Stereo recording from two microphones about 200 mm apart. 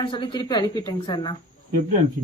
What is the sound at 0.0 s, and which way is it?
Speech, 25° left (ahead or behind).